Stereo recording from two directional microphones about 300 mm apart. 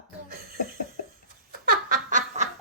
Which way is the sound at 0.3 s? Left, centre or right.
Right.